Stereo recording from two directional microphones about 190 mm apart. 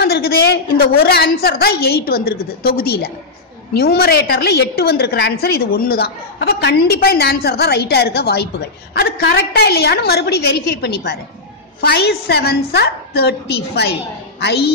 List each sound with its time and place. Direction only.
0.0 s a woman's voice: 55° left (ahead or behind)